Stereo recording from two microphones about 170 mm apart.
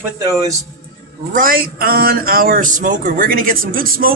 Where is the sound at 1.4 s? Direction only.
55° right (ahead or behind).